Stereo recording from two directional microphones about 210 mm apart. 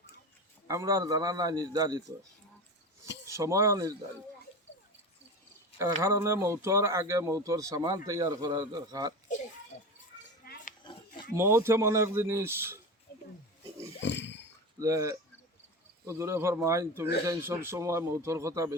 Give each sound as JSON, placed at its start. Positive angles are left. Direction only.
{"t": 0.7, "sound": "speech", "side_deg": -15}
{"t": 3.2, "sound": "speech", "side_deg": -15}
{"t": 5.8, "sound": "speech", "side_deg": -10}
{"t": 10.4, "sound": "a sound", "side_deg": 50}
{"t": 11.3, "sound": "speech", "side_deg": -10}
{"t": 14.0, "sound": "a sound", "side_deg": 55}
{"t": 14.8, "sound": "speech", "side_deg": -15}